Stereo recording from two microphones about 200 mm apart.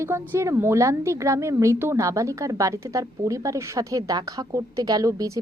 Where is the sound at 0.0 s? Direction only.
10° right (ahead or behind).